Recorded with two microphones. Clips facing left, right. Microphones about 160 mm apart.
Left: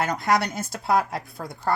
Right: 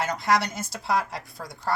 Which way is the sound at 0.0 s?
55° left (ahead or behind).